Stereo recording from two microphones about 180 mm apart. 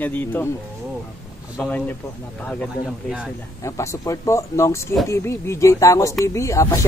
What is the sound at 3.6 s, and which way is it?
Speech, 15° left (ahead or behind).